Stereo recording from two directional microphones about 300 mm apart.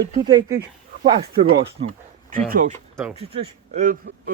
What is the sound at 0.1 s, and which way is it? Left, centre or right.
A man's voice, centre.